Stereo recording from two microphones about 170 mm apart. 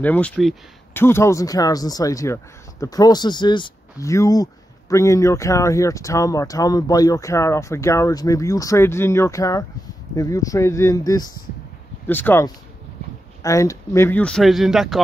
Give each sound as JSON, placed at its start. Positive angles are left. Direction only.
{"t": 0.0, "sound": "speech", "side_deg": 10}